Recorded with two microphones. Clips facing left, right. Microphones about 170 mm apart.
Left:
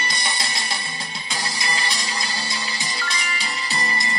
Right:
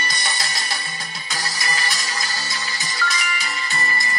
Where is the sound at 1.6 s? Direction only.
30° left (ahead or behind).